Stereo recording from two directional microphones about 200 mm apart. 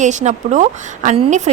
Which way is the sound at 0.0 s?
35° right (ahead or behind).